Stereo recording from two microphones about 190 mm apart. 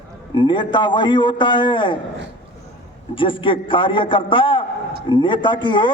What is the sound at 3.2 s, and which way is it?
A man's voice, 25° left (ahead or behind).